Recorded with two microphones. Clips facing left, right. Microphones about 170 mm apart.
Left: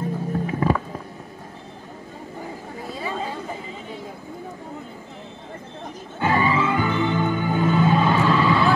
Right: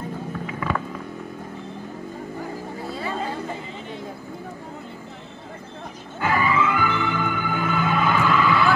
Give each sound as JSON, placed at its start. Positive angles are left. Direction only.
{"t": 0.3, "sound": "music", "side_deg": 35}
{"t": 2.9, "sound": "chatter", "side_deg": 15}
{"t": 6.1, "sound": "music", "side_deg": 30}